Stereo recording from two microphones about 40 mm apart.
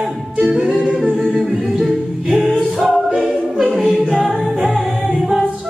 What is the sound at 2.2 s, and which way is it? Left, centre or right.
Music, right.